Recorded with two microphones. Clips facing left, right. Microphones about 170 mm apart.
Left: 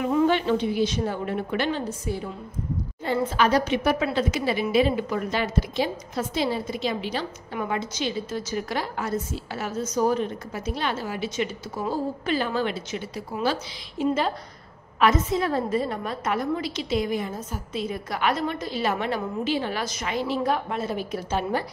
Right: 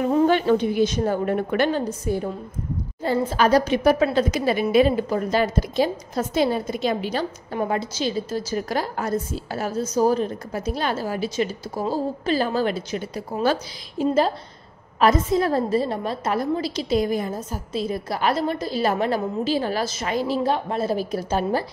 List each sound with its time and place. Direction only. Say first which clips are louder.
0.0 s a woman's voice: right 3 dB; 35° right (ahead or behind)